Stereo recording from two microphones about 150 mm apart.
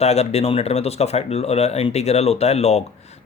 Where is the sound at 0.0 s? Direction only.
45° left (ahead or behind).